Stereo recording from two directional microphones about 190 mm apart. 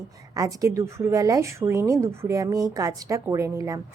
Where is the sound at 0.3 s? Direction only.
20° right (ahead or behind).